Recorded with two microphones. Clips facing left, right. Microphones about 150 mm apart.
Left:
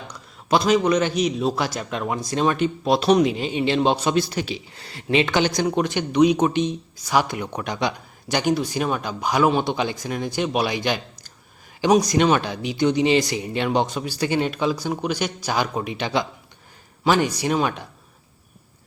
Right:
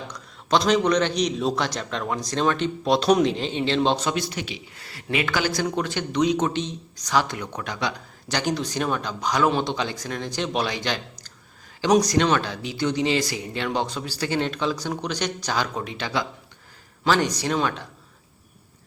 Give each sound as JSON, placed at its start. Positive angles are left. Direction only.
{"t": 0.4, "sound": "speech", "side_deg": 5}
{"t": 4.1, "sound": "speech", "side_deg": 35}
{"t": 17.0, "sound": "speech", "side_deg": 10}